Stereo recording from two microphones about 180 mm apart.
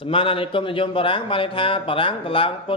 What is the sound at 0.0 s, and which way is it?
A man's voice, 30° left (ahead or behind).